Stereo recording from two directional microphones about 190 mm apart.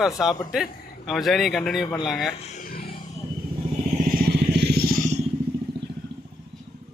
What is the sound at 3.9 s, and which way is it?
Vehicle, 45° right (ahead or behind).